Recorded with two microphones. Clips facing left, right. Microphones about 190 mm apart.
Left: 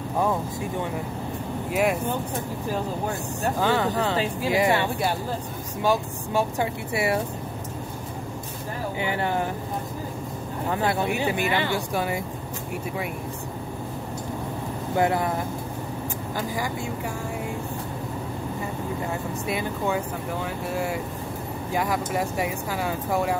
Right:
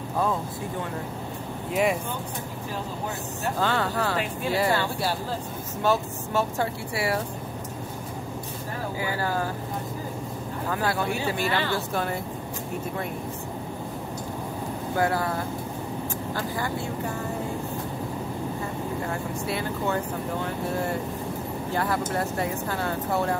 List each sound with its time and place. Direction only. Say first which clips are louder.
1.7 s speech: left 1 dB; 5° left (ahead or behind)
3.5 s speech: left 2 dB; 15° left (ahead or behind)
9.0 s speech: left 2 dB; 20° left (ahead or behind)
10.7 s speech: left 2 dB; 20° left (ahead or behind)
15.0 s speech: left 2 dB; 20° left (ahead or behind)
16.3 s speech: left 2 dB; 10° left (ahead or behind)
19.4 s speech: left 1 dB; 15° left (ahead or behind)
20.4 s speech: left 1 dB; 5° left (ahead or behind)